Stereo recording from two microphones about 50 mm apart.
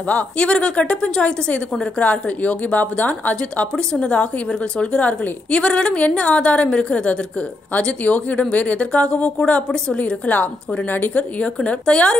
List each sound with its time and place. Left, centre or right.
0.0 s a woman's voice: left
3.7 s a woman's voice: centre
11.8 s a woman's voice: centre